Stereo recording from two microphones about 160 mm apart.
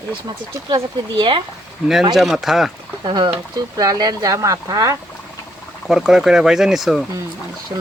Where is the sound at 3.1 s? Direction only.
30° right (ahead or behind).